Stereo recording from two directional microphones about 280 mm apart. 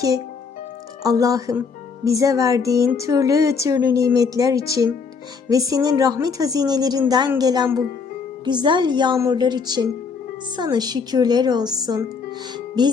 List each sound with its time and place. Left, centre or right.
1.0 s a woman's voice: centre